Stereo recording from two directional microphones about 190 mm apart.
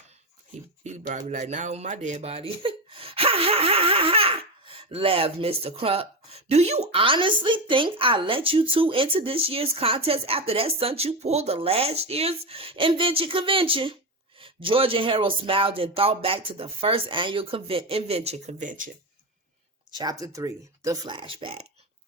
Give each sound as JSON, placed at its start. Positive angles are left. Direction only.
{"t": 0.9, "sound": "speech", "side_deg": -40}
{"t": 19.9, "sound": "speech", "side_deg": -20}